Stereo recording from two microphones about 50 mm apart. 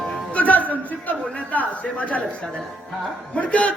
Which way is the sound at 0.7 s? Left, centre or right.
Left.